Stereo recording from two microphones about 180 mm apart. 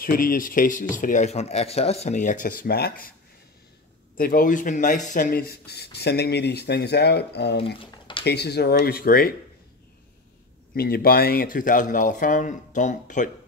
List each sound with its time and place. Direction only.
0.0 s speech: 50° left (ahead or behind)
4.2 s speech: 50° left (ahead or behind)
10.7 s speech: 55° left (ahead or behind)